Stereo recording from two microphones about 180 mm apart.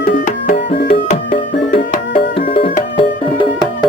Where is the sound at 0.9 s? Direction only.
35° left (ahead or behind).